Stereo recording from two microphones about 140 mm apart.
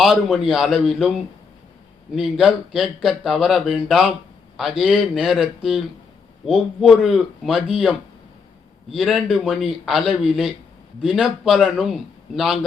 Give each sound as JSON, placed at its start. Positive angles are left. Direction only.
{"t": 0.0, "sound": "speech", "side_deg": 0}